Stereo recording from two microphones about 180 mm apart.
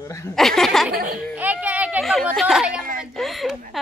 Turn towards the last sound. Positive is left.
turn(degrees=0)  # may be behind; listen again after turning